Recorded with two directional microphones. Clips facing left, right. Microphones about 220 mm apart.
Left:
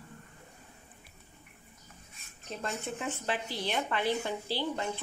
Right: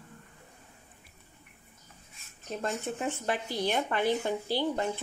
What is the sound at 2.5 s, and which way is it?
Speech, 45° right (ahead or behind).